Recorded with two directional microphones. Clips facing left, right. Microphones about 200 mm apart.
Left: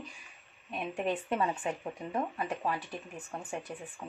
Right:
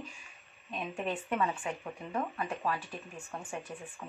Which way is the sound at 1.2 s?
30° left (ahead or behind).